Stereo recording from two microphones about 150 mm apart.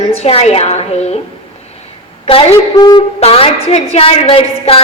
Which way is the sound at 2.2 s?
40° left (ahead or behind).